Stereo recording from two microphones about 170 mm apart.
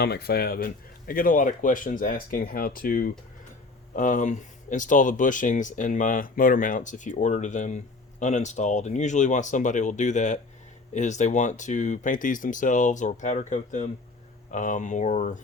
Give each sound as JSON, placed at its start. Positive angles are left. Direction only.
{"t": 0.0, "sound": "speech", "side_deg": 70}